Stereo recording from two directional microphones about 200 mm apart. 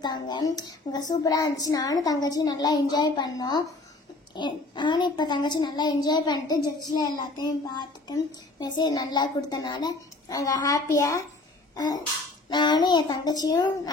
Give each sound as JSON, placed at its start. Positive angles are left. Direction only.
{"t": 0.0, "sound": "a child's voice", "side_deg": 20}
{"t": 11.7, "sound": "sneeze", "side_deg": 20}
{"t": 12.4, "sound": "a child's voice", "side_deg": 20}